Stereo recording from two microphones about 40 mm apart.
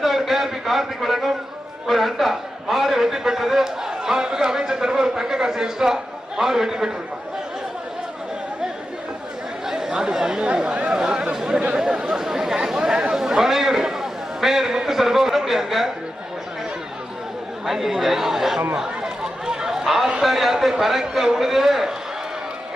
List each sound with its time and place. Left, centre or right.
0.0 s a sound: centre
9.6 s chatter: centre
10.4 s speech: right
11.1 s chatter: centre
11.7 s a sound: right
12.2 s chatter: centre
17.7 s a man's voice: centre
18.8 s chatter: centre
20.2 s a man's voice: centre